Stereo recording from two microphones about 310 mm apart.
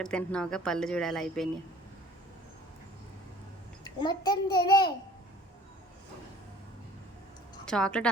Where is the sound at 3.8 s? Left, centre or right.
Centre.